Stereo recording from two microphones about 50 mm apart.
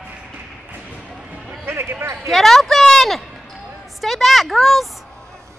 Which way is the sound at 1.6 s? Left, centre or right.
Right.